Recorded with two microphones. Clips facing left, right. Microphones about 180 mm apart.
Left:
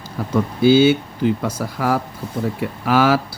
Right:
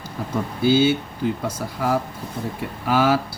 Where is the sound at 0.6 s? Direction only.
90° left.